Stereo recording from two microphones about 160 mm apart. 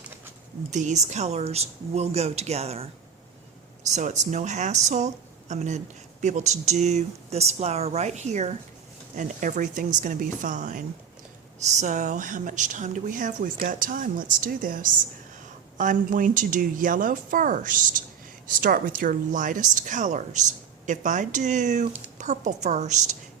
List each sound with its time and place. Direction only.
0.7 s a woman's voice: 50° right (ahead or behind)